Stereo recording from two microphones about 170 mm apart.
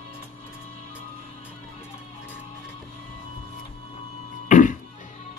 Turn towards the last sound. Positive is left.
turn(degrees=45)  # may be behind; listen again after turning